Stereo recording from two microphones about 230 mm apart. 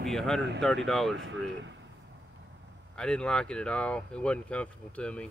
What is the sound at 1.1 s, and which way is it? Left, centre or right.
Speech, right.